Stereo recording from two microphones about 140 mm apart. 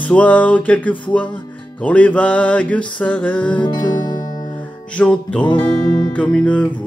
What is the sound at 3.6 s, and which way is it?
Music, 30° left (ahead or behind).